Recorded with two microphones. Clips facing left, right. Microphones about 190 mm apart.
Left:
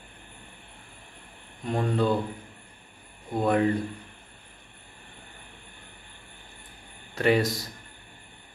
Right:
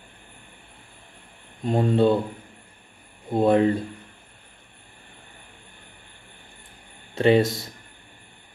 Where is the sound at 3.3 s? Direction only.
25° right (ahead or behind).